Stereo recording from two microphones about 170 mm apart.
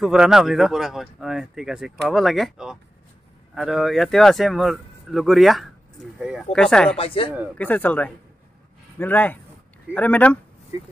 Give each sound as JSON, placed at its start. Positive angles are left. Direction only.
{"t": 0.0, "sound": "speech", "side_deg": -5}
{"t": 7.0, "sound": "speech", "side_deg": 30}
{"t": 7.5, "sound": "speech", "side_deg": 10}